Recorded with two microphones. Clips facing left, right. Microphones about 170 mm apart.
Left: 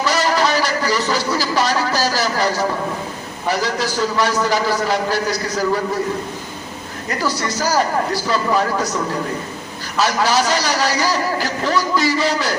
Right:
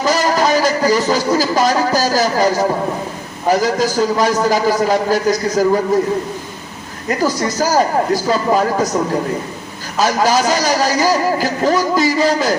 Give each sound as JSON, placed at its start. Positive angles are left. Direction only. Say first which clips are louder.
{"t": 0.0, "sound": "a man's voice", "louder": "right 3 dB", "side_deg": -45}
{"t": 7.2, "sound": "a man's voice", "louder": "right 4 dB", "side_deg": -45}
{"t": 10.0, "sound": "a man's voice", "louder": "right 3 dB", "side_deg": -45}